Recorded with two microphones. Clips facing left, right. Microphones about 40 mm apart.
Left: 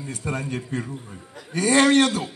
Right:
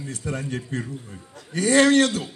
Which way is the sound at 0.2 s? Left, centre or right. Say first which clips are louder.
Left 1 dB; centre.